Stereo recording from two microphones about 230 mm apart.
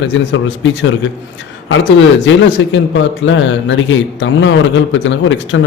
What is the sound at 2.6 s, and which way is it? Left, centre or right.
A man's voice, left.